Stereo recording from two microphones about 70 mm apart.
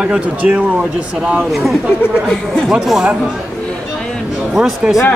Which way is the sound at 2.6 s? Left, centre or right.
Centre.